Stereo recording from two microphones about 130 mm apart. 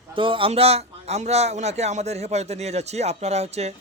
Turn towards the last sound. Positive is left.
turn(degrees=-55)  # may be behind; listen again after turning